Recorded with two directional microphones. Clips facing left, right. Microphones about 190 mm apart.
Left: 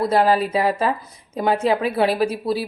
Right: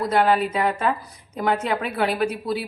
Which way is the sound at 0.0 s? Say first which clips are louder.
Left 2 dB; 30° left (ahead or behind).